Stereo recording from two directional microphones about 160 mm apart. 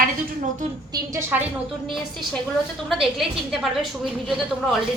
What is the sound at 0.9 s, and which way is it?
Speech, 20° right (ahead or behind).